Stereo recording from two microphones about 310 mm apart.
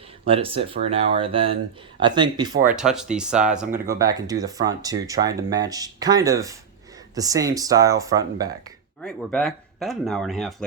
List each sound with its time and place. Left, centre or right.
0.3 s speech: centre
9.0 s speech: centre